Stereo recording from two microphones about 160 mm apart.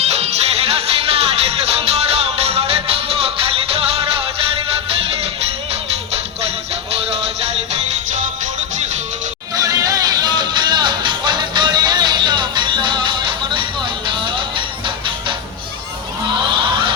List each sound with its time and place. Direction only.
0.1 s music: 40° right (ahead or behind)
6.9 s music: 40° right (ahead or behind)
9.6 s music: 20° right (ahead or behind)
16.6 s a sound: 30° right (ahead or behind)